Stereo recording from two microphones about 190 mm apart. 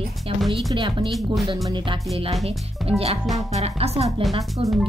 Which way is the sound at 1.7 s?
25° right (ahead or behind).